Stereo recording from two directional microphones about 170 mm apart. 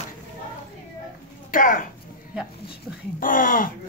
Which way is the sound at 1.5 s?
55° left (ahead or behind).